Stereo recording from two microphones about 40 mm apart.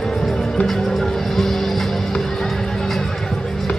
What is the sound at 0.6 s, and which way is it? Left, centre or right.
Music, centre.